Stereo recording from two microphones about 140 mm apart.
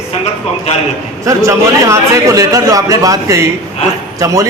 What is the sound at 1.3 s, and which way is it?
A man's voice, 20° right (ahead or behind).